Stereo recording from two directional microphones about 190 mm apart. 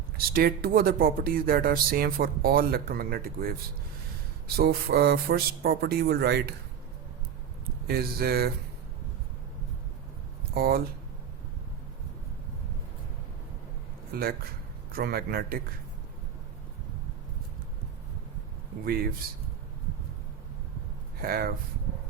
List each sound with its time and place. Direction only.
0.3 s speech: 50° right (ahead or behind)
4.5 s a man's voice: 55° right (ahead or behind)
7.9 s speech: 55° right (ahead or behind)
10.5 s speech: 50° right (ahead or behind)
14.1 s speech: 50° right (ahead or behind)
21.2 s speech: 50° right (ahead or behind)